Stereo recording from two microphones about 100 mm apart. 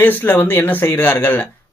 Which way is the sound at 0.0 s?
20° left (ahead or behind).